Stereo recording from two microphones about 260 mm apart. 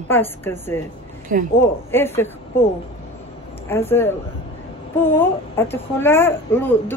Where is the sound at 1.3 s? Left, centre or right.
Right.